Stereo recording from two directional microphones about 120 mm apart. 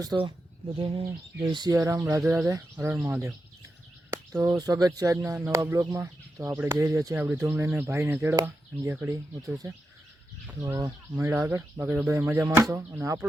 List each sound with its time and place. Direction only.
0.1 s speech: 25° right (ahead or behind)
0.8 s speech: 50° right (ahead or behind)
1.5 s speech: 30° right (ahead or behind)
2.9 s speech: 10° right (ahead or behind)
4.1 s speech: 25° right (ahead or behind)
10.8 s speech: 30° right (ahead or behind)